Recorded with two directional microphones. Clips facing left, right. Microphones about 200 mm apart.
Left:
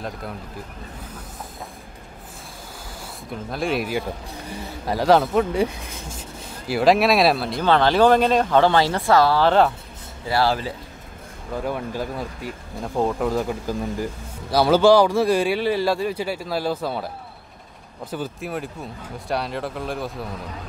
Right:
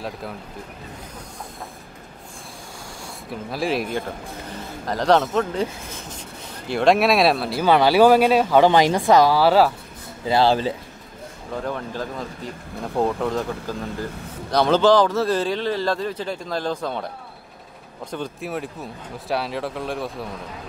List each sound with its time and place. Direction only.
3.5 s speech: centre (ahead or behind)
6.7 s speech: 5° left (ahead or behind)
10.2 s speech: 20° right (ahead or behind)
11.5 s a man's voice: 10° left (ahead or behind)
18.1 s speech: centre (ahead or behind)